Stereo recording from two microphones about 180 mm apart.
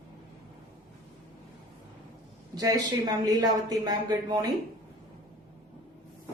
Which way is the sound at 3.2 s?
20° right (ahead or behind).